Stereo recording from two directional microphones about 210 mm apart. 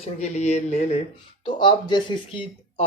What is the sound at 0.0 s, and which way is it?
Speech, 30° left (ahead or behind).